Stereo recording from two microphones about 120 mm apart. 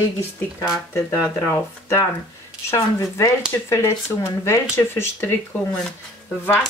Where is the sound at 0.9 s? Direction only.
20° left (ahead or behind).